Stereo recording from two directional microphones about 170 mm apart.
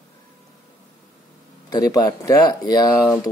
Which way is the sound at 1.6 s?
20° left (ahead or behind).